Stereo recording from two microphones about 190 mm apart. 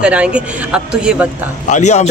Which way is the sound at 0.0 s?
5° right (ahead or behind).